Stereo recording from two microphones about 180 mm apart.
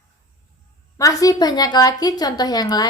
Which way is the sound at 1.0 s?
20° left (ahead or behind).